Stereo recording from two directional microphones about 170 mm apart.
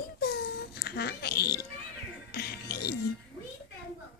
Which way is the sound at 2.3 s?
65° left (ahead or behind).